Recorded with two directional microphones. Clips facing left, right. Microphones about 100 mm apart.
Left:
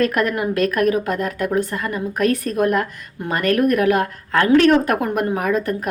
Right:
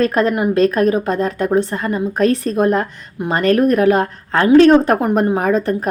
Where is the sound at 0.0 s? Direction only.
30° right (ahead or behind).